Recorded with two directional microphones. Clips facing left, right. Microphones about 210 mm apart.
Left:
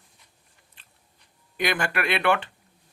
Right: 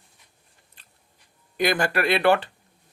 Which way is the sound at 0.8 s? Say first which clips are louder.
Even; 40° right (ahead or behind).